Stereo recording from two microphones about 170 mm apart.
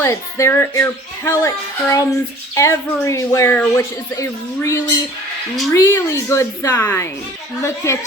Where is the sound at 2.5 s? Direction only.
15° left (ahead or behind).